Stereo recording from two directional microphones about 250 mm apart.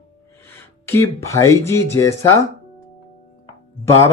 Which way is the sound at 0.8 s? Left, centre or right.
Centre.